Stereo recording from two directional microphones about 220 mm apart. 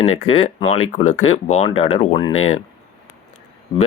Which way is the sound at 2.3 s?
70° left (ahead or behind).